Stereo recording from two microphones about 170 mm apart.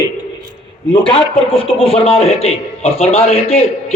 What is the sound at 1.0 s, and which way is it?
Speech, 5° left (ahead or behind).